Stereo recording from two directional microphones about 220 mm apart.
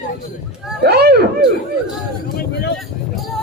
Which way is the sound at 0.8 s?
45° right (ahead or behind).